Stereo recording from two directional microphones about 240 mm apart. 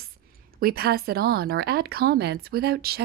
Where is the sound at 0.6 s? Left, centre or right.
Right.